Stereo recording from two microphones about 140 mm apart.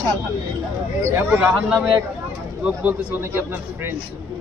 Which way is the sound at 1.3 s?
10° right (ahead or behind).